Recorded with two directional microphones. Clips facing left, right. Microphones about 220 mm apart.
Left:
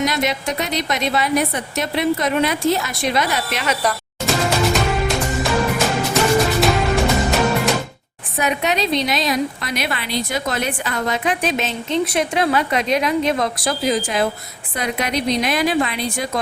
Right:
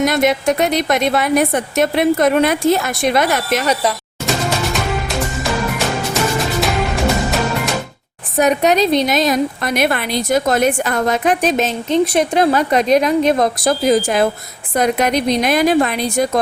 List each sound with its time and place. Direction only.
0.0 s a woman's voice: 50° right (ahead or behind)
3.8 s music: centre (ahead or behind)
6.6 s music: centre (ahead or behind)
8.4 s a woman's voice: 40° right (ahead or behind)